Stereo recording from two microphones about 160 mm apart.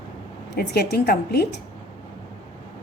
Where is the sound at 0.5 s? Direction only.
85° left.